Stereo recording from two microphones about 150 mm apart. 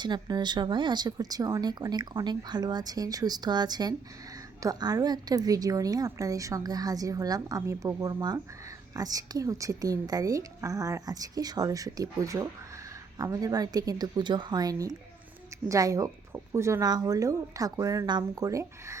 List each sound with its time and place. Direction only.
0.0 s speech: 30° right (ahead or behind)